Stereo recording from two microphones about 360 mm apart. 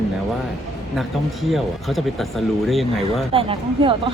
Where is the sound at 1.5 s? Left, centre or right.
Centre.